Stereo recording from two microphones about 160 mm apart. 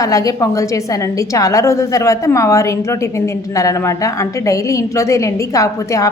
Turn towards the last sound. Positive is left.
turn(degrees=20)  # may be behind; listen again after turning